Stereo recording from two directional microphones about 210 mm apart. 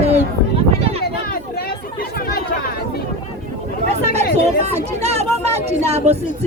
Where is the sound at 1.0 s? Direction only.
45° left (ahead or behind).